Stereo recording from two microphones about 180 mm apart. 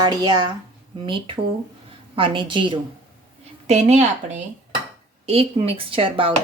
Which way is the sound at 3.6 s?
40° right (ahead or behind).